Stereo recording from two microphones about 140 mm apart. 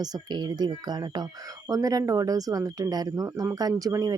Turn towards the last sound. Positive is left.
turn(degrees=-25)  # may be behind; listen again after turning